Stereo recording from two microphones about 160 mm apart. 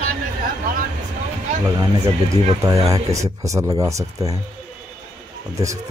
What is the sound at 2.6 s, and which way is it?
Speech, 20° right (ahead or behind).